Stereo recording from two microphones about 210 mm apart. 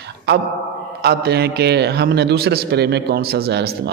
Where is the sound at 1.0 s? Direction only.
50° right (ahead or behind).